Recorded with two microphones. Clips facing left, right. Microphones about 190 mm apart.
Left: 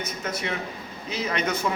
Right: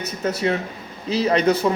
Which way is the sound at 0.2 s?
35° right (ahead or behind).